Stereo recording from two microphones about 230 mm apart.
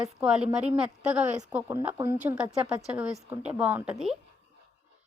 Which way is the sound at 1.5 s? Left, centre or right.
Centre.